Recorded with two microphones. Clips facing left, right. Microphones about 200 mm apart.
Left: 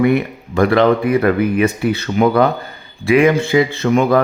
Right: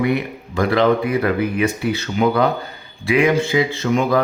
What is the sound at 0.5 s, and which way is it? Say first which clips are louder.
Speech: left 3 dB; 55° left (ahead or behind).